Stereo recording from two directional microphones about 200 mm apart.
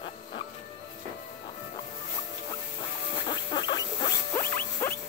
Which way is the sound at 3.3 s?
20° left (ahead or behind).